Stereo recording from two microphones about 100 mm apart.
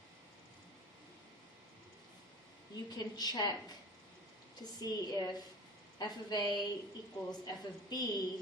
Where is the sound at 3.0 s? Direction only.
45° left (ahead or behind).